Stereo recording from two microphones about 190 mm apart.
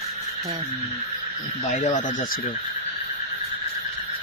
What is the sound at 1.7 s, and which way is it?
Speech, 40° left (ahead or behind).